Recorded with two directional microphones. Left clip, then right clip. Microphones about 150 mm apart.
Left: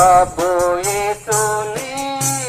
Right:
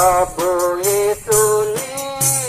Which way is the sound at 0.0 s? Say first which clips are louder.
Left 4 dB; 30° left (ahead or behind).